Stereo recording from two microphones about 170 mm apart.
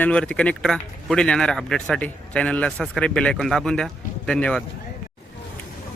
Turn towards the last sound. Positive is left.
turn(degrees=5)  # may be behind; listen again after turning